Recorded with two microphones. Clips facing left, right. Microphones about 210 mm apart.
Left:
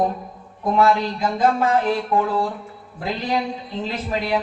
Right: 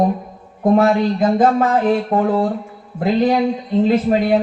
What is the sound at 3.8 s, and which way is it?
Speech, 55° right (ahead or behind).